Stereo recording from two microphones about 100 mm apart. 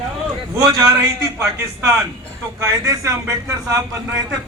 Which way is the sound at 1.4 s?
35° right (ahead or behind).